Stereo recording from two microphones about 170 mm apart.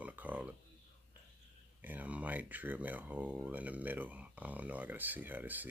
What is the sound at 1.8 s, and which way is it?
Speech, 10° right (ahead or behind).